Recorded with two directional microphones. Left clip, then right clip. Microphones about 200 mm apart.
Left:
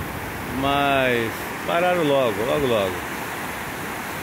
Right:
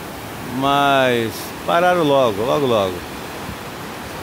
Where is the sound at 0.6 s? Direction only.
20° right (ahead or behind).